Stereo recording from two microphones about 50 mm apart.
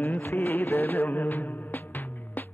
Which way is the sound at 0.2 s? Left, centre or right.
Left.